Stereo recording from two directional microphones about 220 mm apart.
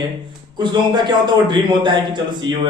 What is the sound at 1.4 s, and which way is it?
Speech, 20° right (ahead or behind).